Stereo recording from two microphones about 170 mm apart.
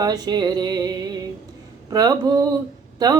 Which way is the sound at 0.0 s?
25° right (ahead or behind).